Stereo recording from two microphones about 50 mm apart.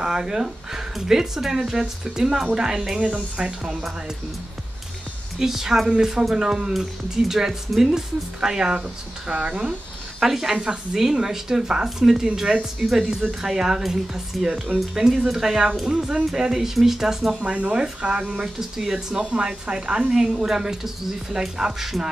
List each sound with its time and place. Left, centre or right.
0.0 s speech: centre
5.4 s speech: centre
9.3 s speech: right
10.2 s speech: centre
17.4 s speech: right
18.0 s speech: centre